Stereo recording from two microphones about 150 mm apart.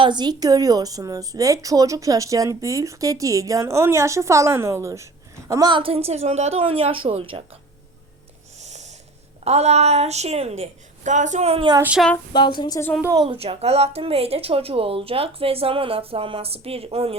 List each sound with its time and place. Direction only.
0.0 s a woman's voice: 30° right (ahead or behind)
8.5 s snort: 50° right (ahead or behind)
9.4 s a woman's voice: 45° right (ahead or behind)
11.8 s speech: 10° right (ahead or behind)
12.3 s a woman's voice: 30° left (ahead or behind)
13.1 s a woman's voice: 35° right (ahead or behind)